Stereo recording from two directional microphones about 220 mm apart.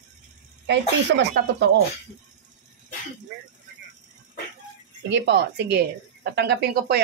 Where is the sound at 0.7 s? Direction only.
50° right (ahead or behind).